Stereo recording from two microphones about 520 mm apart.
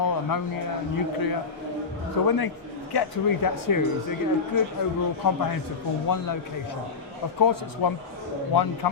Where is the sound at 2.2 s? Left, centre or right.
Left.